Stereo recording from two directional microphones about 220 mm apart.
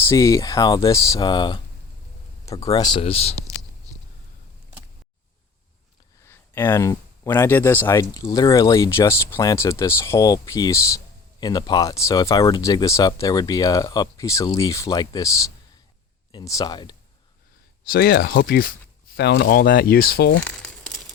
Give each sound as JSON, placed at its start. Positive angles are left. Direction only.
{"t": 0.1, "sound": "speech", "side_deg": 15}
{"t": 6.2, "sound": "speech", "side_deg": 10}
{"t": 16.3, "sound": "speech", "side_deg": 15}
{"t": 17.8, "sound": "speech", "side_deg": 45}
{"t": 20.4, "sound": "crumpling", "side_deg": 5}